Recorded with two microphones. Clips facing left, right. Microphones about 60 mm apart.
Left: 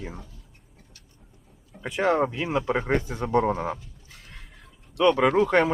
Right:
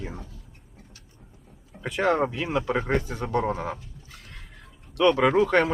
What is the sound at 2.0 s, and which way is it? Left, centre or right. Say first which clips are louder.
Speech: even; centre.